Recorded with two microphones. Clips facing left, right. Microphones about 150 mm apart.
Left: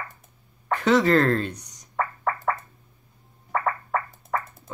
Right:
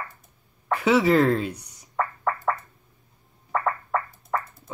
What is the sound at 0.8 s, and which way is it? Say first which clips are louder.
Speech: even; 5° right (ahead or behind).